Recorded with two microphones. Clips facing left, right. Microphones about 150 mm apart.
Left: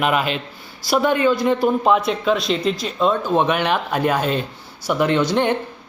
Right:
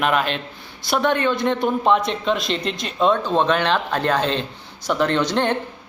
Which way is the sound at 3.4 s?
10° left (ahead or behind).